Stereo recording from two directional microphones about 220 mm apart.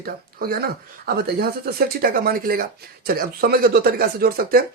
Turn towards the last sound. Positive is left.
turn(degrees=-40)  # may be behind; listen again after turning